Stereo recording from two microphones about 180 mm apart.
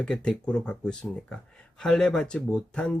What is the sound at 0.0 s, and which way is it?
Speech, 5° left (ahead or behind).